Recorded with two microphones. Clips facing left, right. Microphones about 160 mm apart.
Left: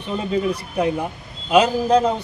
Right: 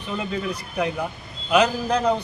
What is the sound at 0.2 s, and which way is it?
A man's voice, 30° left (ahead or behind).